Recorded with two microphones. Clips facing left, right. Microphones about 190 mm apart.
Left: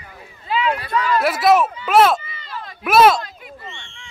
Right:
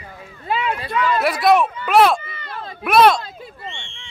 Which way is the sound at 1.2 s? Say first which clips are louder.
Even; centre (ahead or behind).